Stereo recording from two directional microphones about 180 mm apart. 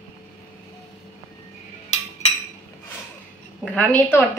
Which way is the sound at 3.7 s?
10° left (ahead or behind).